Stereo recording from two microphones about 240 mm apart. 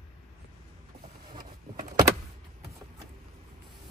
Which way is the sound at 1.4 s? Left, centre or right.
Centre.